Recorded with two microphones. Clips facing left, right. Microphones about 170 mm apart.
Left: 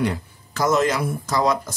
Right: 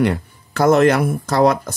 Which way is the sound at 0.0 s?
60° right (ahead or behind).